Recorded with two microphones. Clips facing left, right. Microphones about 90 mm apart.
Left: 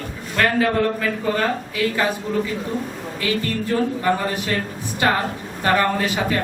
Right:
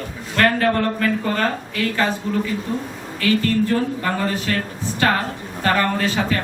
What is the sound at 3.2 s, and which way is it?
Speech, 20° left (ahead or behind).